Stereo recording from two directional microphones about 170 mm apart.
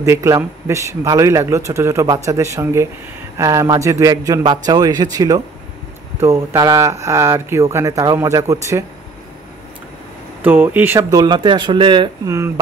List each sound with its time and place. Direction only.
0.0 s speech: 15° right (ahead or behind)
10.4 s speech: 10° right (ahead or behind)